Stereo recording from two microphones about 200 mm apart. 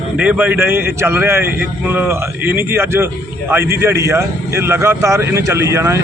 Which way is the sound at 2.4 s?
10° right (ahead or behind).